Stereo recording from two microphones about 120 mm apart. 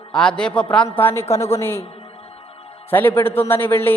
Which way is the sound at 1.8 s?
55° left (ahead or behind).